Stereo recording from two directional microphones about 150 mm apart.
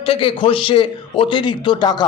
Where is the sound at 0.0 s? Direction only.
35° left (ahead or behind).